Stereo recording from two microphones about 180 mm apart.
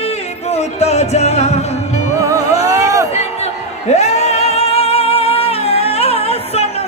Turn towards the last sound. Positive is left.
turn(degrees=35)  # may be behind; listen again after turning